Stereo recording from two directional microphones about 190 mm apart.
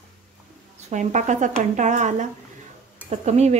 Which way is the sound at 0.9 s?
40° right (ahead or behind).